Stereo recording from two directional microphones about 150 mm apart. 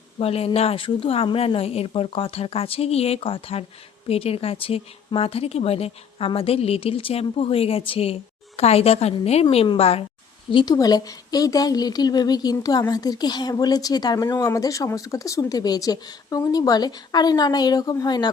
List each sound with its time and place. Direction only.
0.2 s speech: 40° left (ahead or behind)
10.5 s speech: 30° left (ahead or behind)